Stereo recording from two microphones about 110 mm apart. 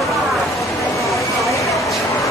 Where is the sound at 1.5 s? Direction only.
30° left (ahead or behind).